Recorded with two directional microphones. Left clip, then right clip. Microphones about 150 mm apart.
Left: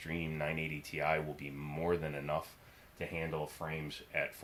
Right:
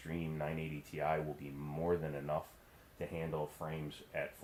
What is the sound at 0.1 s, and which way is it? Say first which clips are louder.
Speech: left 3 dB; 30° left (ahead or behind).